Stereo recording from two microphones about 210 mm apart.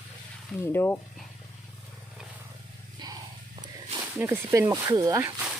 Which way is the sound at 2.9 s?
20° right (ahead or behind).